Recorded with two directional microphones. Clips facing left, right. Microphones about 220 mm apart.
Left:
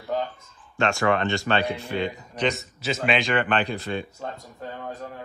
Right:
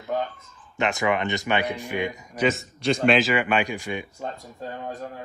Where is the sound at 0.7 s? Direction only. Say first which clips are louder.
Left 1 dB; 15° right (ahead or behind).